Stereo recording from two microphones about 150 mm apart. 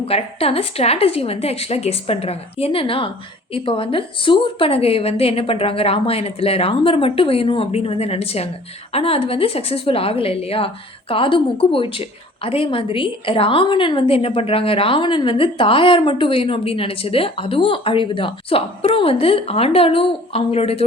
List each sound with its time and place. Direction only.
0.0 s a woman's voice: 40° left (ahead or behind)